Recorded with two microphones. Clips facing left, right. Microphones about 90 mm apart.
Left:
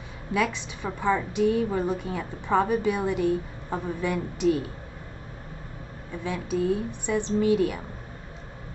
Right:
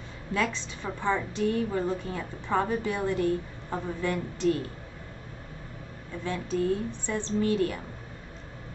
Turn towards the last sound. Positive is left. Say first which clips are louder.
# left 4 dB
turn(degrees=15)  # may be behind; listen again after turning